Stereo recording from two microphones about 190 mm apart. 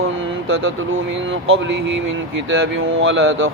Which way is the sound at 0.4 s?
90° right.